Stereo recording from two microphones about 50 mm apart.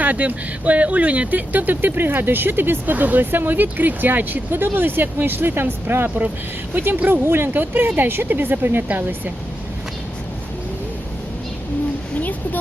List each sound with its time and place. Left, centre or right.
0.0 s speech: right